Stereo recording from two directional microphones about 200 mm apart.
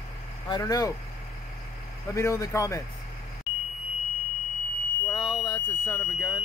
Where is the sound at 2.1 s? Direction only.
15° left (ahead or behind).